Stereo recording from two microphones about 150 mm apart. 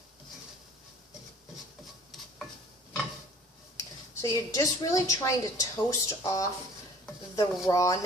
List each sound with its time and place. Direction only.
3.8 s a woman's voice: 20° left (ahead or behind)